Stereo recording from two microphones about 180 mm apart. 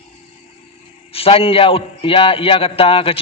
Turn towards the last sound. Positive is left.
turn(degrees=30)  # may be behind; listen again after turning